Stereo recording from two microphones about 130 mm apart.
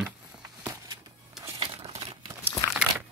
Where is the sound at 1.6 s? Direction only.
45° right (ahead or behind).